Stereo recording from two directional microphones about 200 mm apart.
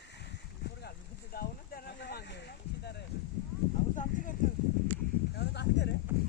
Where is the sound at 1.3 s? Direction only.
50° left (ahead or behind).